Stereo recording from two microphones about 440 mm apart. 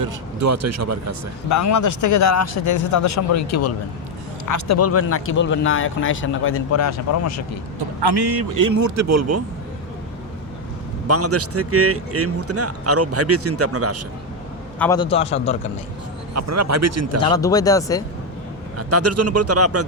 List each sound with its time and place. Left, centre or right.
0.0 s speech: right
1.5 s speech: left
8.0 s speech: right
11.1 s speech: right
14.8 s a man's voice: centre
16.3 s speech: right
17.2 s a man's voice: centre
18.8 s speech: right